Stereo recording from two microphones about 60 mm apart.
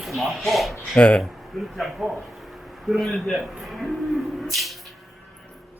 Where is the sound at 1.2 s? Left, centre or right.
Centre.